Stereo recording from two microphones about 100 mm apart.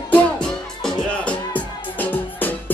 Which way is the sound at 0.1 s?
10° left (ahead or behind).